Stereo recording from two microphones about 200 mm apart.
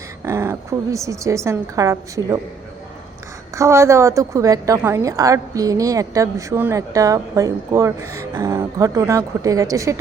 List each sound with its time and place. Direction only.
0.3 s a woman's voice: 15° right (ahead or behind)
3.5 s a woman's voice: 15° right (ahead or behind)